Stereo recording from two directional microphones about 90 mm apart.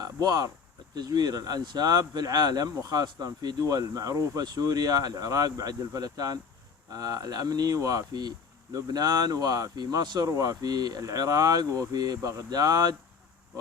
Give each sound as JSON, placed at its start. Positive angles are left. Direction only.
{"t": 0.0, "sound": "speech", "side_deg": -45}
{"t": 10.2, "sound": "speech", "side_deg": -40}